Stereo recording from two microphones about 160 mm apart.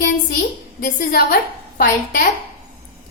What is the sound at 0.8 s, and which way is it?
Speech, 60° left (ahead or behind).